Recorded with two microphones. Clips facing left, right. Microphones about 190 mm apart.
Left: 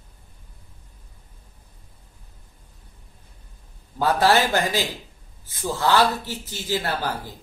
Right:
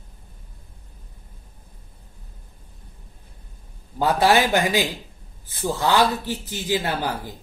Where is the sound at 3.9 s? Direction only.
15° right (ahead or behind).